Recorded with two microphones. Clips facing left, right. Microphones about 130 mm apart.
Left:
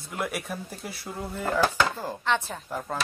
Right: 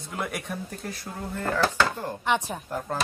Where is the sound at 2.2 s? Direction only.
15° right (ahead or behind).